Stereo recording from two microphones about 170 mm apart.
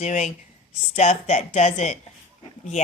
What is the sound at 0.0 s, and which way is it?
A woman's voice, 45° left (ahead or behind).